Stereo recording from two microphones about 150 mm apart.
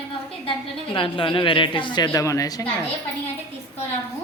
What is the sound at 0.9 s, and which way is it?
A woman's voice, 35° left (ahead or behind).